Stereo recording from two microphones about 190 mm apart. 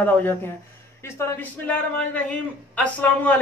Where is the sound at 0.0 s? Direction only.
10° left (ahead or behind).